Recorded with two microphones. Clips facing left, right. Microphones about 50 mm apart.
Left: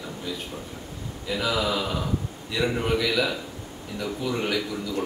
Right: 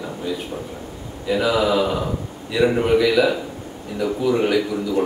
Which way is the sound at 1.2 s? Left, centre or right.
Centre.